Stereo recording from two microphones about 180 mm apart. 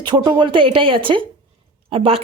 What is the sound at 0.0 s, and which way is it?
Speech, 25° right (ahead or behind).